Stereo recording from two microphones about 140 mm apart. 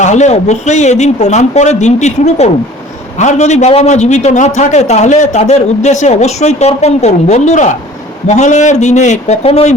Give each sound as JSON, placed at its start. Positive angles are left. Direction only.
{"t": 0.0, "sound": "a man's voice", "side_deg": 55}